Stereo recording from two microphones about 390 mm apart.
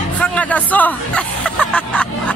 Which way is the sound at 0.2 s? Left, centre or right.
Centre.